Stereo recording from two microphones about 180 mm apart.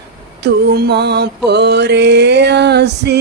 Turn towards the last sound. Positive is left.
turn(degrees=-65)  # may be behind; listen again after turning